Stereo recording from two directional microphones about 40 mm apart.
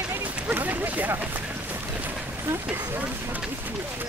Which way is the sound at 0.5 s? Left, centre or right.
Right.